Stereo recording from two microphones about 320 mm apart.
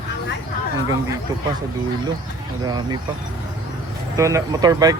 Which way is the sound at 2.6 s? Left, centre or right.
Centre.